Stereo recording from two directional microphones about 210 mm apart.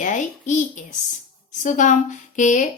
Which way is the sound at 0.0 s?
35° left (ahead or behind).